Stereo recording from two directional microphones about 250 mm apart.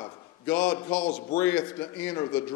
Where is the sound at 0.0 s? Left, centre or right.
Centre.